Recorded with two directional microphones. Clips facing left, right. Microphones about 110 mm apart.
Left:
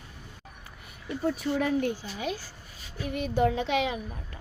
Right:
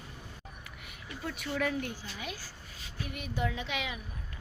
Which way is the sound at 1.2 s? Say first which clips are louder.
Left 6 dB; 30° left (ahead or behind).